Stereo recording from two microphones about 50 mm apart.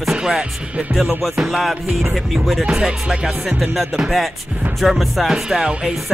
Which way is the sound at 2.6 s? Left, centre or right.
Centre.